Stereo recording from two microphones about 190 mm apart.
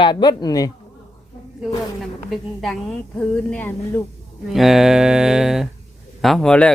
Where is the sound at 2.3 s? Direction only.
Centre (ahead or behind).